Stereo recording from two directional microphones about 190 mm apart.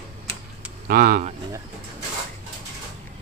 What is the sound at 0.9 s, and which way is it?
Speech, 45° right (ahead or behind).